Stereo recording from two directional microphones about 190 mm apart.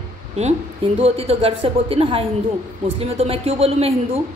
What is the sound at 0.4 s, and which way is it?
A woman's voice, 35° right (ahead or behind).